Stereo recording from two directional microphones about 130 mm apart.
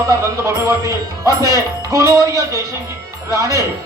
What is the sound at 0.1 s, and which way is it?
Speech, 25° right (ahead or behind).